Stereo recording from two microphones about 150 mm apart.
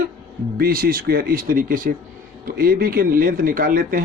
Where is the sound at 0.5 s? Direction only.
80° right.